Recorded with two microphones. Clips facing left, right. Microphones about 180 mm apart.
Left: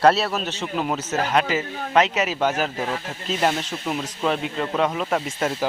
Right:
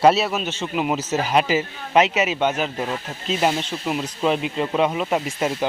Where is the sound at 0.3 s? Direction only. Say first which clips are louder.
Right 1 dB; centre (ahead or behind).